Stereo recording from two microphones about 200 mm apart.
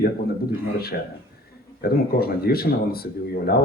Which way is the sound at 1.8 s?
50° left (ahead or behind).